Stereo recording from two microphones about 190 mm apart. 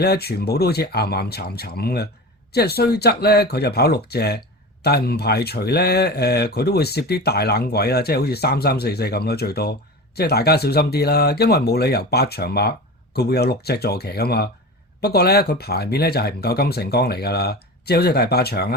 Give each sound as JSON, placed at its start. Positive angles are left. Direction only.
{"t": 0.0, "sound": "speech", "side_deg": 55}